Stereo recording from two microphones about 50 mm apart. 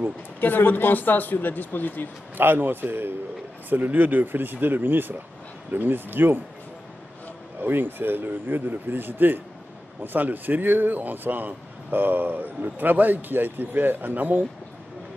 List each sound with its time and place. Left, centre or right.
0.4 s speech: left
2.3 s speech: right
3.7 s speech: right
7.6 s speech: right